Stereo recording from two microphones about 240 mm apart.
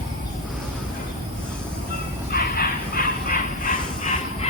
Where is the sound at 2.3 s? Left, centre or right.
Left.